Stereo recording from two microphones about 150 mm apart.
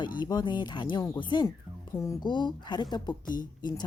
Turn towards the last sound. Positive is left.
turn(degrees=30)  # may be behind; listen again after turning